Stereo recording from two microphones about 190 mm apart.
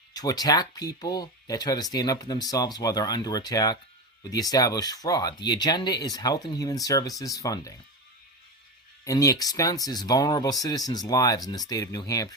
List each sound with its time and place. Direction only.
0.1 s speech: 20° left (ahead or behind)
9.0 s speech: 20° left (ahead or behind)